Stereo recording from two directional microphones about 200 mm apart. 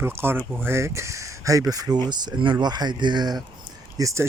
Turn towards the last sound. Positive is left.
turn(degrees=-15)  # may be behind; listen again after turning